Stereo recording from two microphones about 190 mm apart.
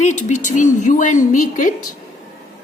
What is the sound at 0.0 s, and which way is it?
A woman's voice, 40° left (ahead or behind).